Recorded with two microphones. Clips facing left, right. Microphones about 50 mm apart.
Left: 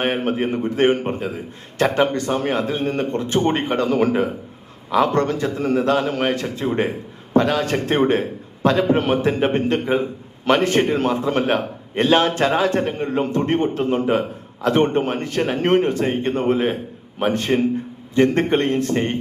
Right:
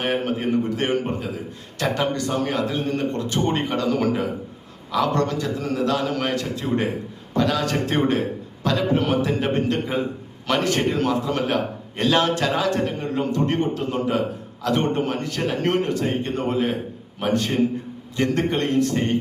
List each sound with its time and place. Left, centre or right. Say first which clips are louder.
0.0 s a man's voice: left 3 dB; left